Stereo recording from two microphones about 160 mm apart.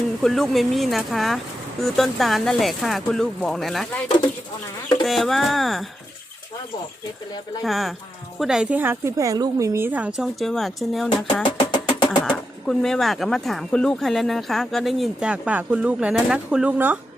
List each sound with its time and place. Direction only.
0.2 s speech: centre (ahead or behind)
5.0 s speech: centre (ahead or behind)
7.6 s a woman's voice: centre (ahead or behind)
10.2 s speech: centre (ahead or behind)
11.4 s music: 30° left (ahead or behind)
12.2 s speech: 5° left (ahead or behind)